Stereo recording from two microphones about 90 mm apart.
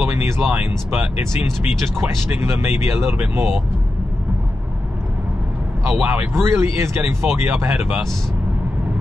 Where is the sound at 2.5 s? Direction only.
30° right (ahead or behind).